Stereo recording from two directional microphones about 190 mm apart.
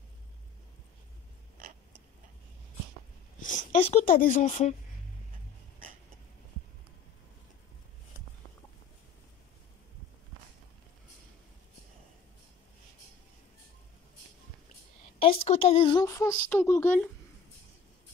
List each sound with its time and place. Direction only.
3.3 s a sound: 45° left (ahead or behind)
4.1 s speech: 45° left (ahead or behind)
15.1 s a woman's voice: 30° left (ahead or behind); by 17.1 s 10° left (ahead or behind)